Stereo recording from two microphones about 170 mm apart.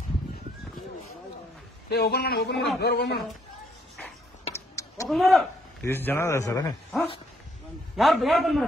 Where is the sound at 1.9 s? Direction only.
70° left (ahead or behind).